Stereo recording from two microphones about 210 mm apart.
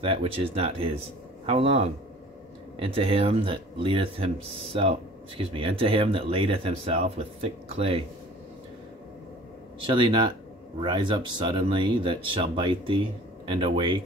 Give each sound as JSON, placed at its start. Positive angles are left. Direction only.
{"t": 0.0, "sound": "speech", "side_deg": -25}
{"t": 5.4, "sound": "speech", "side_deg": -25}
{"t": 9.8, "sound": "speech", "side_deg": -25}